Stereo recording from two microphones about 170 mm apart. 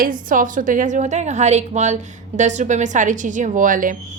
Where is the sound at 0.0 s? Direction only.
55° right (ahead or behind).